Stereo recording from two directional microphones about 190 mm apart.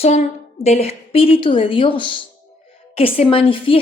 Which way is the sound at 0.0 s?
35° left (ahead or behind).